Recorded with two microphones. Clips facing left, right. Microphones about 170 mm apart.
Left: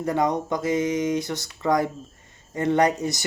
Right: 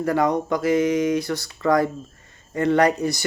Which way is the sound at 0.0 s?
20° left (ahead or behind).